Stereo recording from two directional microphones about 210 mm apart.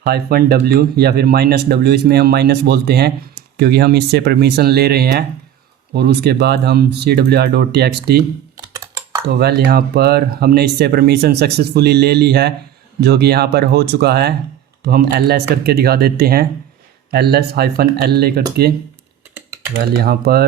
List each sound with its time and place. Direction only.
0.0 s speech: 45° right (ahead or behind)
8.5 s computer keyboard: 15° right (ahead or behind)
9.3 s speech: 50° right (ahead or behind)
20.0 s speech: 50° right (ahead or behind)